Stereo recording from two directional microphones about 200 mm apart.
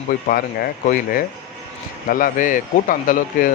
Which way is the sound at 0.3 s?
45° left (ahead or behind).